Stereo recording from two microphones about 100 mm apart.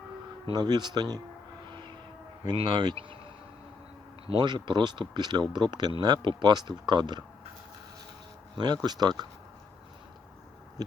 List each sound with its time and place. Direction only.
0.5 s speech: 45° right (ahead or behind)
2.6 s speech: 50° right (ahead or behind)
4.3 s speech: 50° right (ahead or behind)
8.5 s speech: 45° right (ahead or behind)
10.8 s owl: 40° right (ahead or behind)